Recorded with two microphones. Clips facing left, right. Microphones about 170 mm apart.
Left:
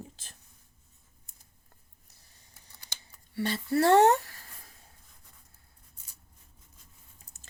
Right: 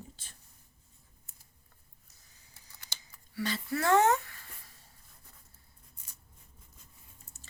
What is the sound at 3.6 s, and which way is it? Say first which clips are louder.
Speech: left 5 dB; 30° left (ahead or behind).